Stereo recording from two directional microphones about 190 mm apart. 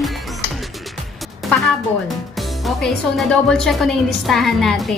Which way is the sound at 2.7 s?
Centre (ahead or behind).